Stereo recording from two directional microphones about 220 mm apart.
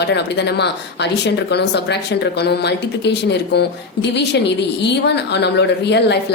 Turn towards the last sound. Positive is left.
turn(degrees=50)  # may be behind; listen again after turning